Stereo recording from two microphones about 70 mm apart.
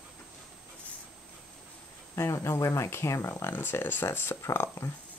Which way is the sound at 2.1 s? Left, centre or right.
Left.